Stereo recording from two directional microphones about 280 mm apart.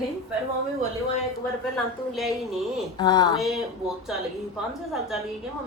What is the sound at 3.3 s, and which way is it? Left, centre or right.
A woman's voice, centre.